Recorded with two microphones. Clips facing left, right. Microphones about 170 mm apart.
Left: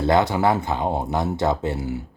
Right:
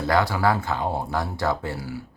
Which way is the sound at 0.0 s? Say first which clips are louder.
Left 3 dB; 20° left (ahead or behind).